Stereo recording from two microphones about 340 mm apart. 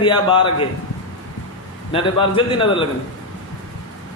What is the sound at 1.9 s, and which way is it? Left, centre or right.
Speech, centre.